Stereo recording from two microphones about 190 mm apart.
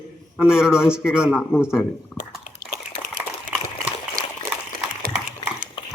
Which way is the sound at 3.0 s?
40° right (ahead or behind).